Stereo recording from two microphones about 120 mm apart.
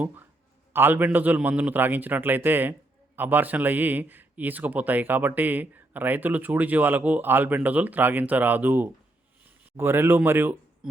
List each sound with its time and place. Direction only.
0.0 s a man's voice: 15° right (ahead or behind)